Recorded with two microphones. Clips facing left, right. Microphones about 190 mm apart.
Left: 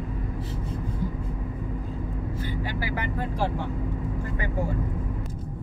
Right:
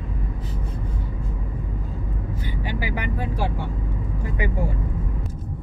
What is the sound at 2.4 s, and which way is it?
Vehicle, 15° right (ahead or behind).